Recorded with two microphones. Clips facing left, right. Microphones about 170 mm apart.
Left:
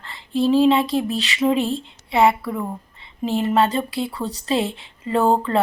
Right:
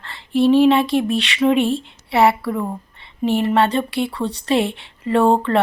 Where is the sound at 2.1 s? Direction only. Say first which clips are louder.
Right 1 dB; 70° right (ahead or behind).